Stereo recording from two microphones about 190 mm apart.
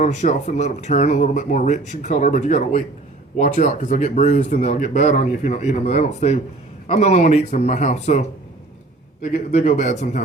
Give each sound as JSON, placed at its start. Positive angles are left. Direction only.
{"t": 0.0, "sound": "speech", "side_deg": 40}